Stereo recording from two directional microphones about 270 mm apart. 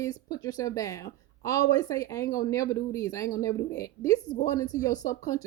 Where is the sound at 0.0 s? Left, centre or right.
Centre.